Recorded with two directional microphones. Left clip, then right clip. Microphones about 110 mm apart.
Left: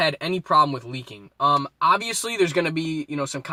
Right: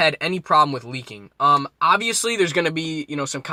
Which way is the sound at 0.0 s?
30° right (ahead or behind).